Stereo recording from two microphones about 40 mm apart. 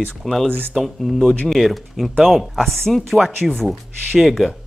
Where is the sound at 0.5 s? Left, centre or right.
Right.